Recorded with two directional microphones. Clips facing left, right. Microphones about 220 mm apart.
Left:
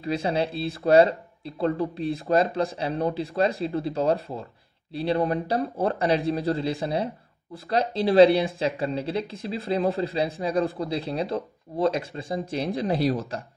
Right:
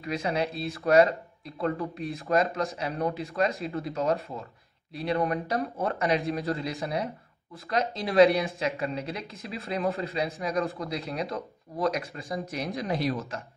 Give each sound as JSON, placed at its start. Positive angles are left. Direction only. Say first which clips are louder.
{"t": 0.0, "sound": "speech", "louder": "left 3 dB", "side_deg": 30}